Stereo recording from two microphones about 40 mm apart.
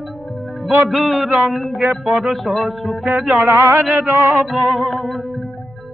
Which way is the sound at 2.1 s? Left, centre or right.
Centre.